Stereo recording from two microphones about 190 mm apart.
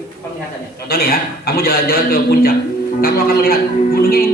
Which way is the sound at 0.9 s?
55° left (ahead or behind).